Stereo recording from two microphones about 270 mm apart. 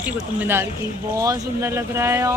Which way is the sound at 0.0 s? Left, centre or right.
Centre.